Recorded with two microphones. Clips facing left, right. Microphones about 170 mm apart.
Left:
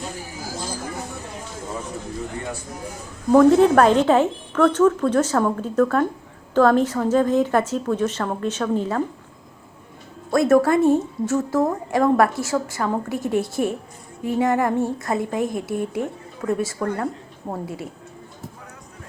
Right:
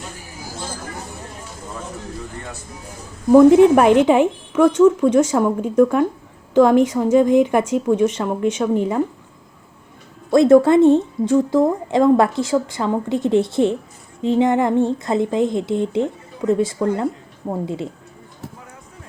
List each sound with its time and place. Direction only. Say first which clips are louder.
3.3 s speech: right 4 dB; 15° right (ahead or behind)
10.3 s a woman's voice: right 5 dB; 20° right (ahead or behind)